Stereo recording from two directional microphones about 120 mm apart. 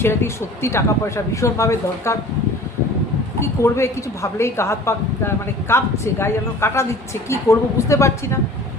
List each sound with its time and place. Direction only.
0.0 s a woman's voice: 20° left (ahead or behind)
3.4 s a woman's voice: 25° left (ahead or behind)